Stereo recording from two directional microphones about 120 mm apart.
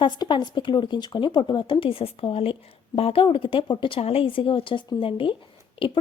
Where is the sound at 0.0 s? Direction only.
40° left (ahead or behind).